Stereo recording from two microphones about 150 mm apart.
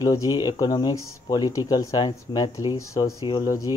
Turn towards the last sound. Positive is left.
turn(degrees=25)  # may be behind; listen again after turning